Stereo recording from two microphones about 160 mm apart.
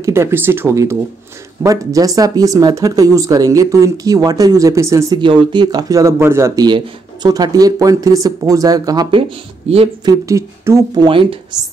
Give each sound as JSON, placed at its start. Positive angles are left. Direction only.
{"t": 0.0, "sound": "speech", "side_deg": -15}
{"t": 5.2, "sound": "speech", "side_deg": -30}
{"t": 11.1, "sound": "a woman's voice", "side_deg": -35}